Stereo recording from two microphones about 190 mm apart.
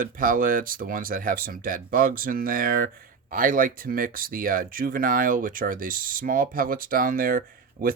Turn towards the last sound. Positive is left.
turn(degrees=-45)  # may be behind; listen again after turning